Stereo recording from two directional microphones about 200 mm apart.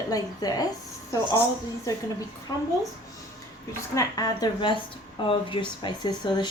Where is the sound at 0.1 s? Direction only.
20° left (ahead or behind).